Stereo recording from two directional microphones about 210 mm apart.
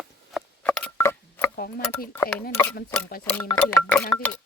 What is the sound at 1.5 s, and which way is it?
Speech, 45° left (ahead or behind).